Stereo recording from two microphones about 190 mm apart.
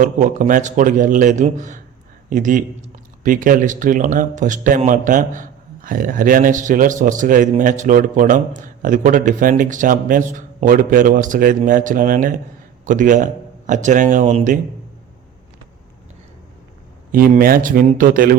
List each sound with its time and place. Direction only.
0.0 s speech: 40° right (ahead or behind)
17.1 s speech: 50° right (ahead or behind)